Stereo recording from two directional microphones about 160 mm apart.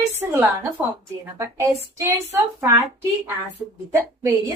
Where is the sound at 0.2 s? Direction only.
15° right (ahead or behind).